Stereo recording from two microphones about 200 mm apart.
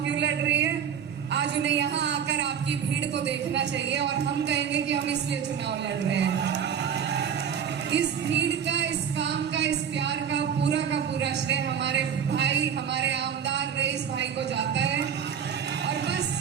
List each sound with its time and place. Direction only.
0.1 s a sound: 60° right (ahead or behind)
3.2 s a woman's voice: 60° right (ahead or behind)
7.9 s music: 60° right (ahead or behind)